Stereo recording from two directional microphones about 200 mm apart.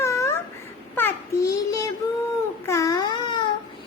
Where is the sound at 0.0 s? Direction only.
15° left (ahead or behind).